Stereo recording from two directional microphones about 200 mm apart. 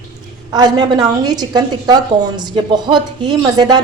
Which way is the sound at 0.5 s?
20° right (ahead or behind).